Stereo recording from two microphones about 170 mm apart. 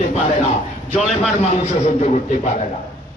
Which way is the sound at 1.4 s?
40° left (ahead or behind).